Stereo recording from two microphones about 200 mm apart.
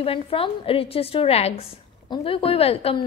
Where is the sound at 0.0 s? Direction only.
25° left (ahead or behind).